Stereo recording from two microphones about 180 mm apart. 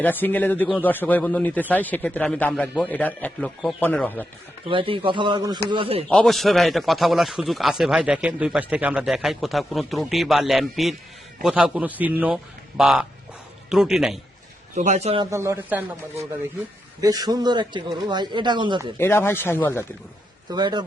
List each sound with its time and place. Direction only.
0.0 s speech: 10° left (ahead or behind)
4.6 s speech: 30° right (ahead or behind)
6.1 s speech: 5° left (ahead or behind)
14.8 s speech: 40° right (ahead or behind)
15.3 s speech: 15° right (ahead or behind)
18.9 s speech: 10° left (ahead or behind)
20.5 s speech: 25° right (ahead or behind)